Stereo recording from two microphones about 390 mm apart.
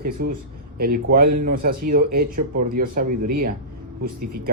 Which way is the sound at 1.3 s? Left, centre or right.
Right.